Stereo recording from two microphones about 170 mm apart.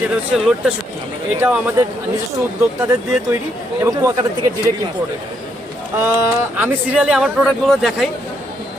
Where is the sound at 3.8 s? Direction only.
20° right (ahead or behind).